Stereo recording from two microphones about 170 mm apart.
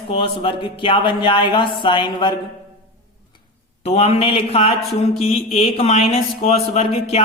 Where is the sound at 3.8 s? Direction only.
35° left (ahead or behind).